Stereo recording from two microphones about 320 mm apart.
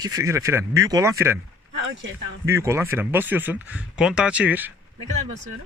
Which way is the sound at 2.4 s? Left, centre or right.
Centre.